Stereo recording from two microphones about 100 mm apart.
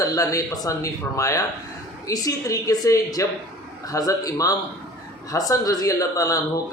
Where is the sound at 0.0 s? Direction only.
35° left (ahead or behind).